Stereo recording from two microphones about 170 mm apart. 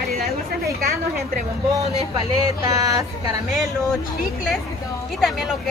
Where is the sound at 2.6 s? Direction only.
20° right (ahead or behind).